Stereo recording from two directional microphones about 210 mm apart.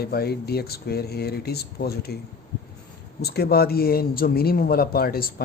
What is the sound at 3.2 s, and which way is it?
Speech, 50° left (ahead or behind).